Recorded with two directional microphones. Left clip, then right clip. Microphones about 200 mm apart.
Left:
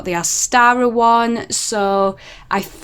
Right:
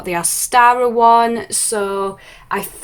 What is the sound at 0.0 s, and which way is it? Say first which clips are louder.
Speech: left 1 dB; 25° left (ahead or behind).